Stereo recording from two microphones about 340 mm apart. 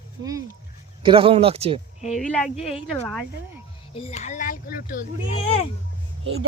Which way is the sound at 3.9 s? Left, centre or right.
Centre.